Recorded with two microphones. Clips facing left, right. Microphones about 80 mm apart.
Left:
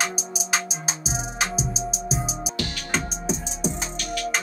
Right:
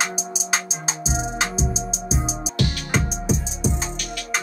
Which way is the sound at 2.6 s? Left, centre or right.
Centre.